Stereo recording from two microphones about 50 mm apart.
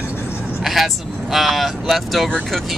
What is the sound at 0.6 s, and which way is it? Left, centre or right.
Speech, centre.